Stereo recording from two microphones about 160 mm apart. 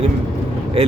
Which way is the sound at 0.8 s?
35° right (ahead or behind).